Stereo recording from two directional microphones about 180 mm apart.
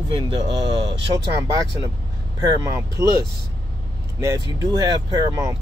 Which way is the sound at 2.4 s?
20° right (ahead or behind).